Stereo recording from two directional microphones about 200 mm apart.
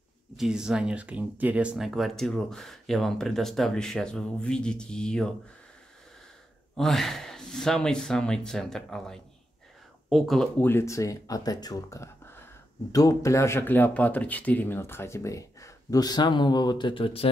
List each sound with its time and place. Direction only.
0.4 s speech: 5° right (ahead or behind)
6.8 s speech: centre (ahead or behind); by 17.3 s 30° left (ahead or behind)